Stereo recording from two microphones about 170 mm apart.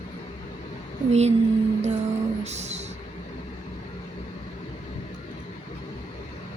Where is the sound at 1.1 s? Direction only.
40° right (ahead or behind).